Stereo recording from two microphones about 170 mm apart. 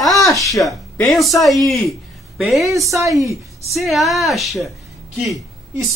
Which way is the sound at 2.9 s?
20° right (ahead or behind).